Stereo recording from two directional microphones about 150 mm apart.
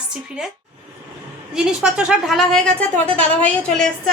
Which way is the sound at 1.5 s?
5° right (ahead or behind).